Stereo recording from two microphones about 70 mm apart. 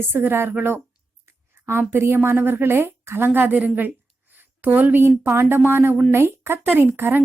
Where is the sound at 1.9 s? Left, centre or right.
Right.